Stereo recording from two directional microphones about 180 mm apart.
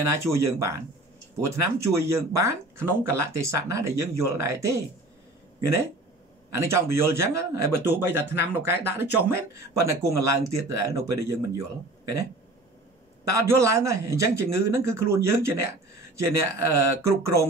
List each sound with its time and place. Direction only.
0.0 s speech: 15° right (ahead or behind)
6.5 s speech: 15° right (ahead or behind)
13.3 s speech: 15° right (ahead or behind)